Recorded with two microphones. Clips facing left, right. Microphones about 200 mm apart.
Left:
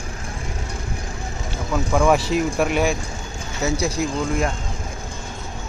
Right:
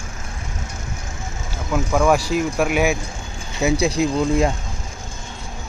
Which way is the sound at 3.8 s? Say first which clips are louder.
Right 4 dB; 20° right (ahead or behind).